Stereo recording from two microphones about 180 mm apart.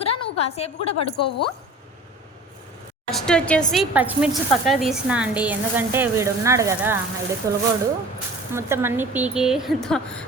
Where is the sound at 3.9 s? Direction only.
10° right (ahead or behind).